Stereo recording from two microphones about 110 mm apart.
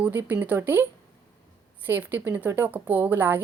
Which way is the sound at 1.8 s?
15° right (ahead or behind).